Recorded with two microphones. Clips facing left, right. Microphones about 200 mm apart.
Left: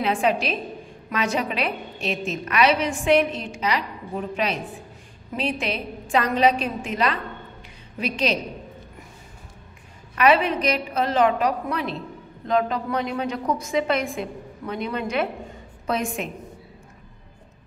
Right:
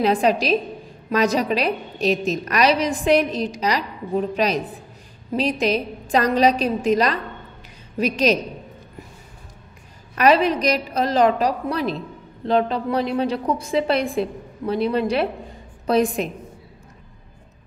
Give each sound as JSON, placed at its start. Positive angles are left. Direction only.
{"t": 0.0, "sound": "a woman's voice", "side_deg": -35}
{"t": 10.1, "sound": "a woman's voice", "side_deg": -40}